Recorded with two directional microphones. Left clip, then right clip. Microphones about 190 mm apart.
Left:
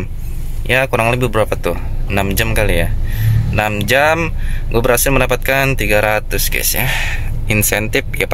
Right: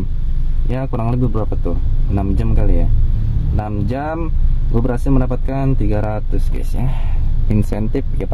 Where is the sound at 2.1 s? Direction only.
Centre (ahead or behind).